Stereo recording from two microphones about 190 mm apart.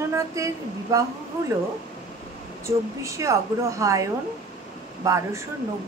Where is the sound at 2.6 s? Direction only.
15° right (ahead or behind).